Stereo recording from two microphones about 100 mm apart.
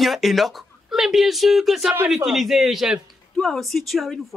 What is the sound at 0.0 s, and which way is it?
Speech, centre (ahead or behind).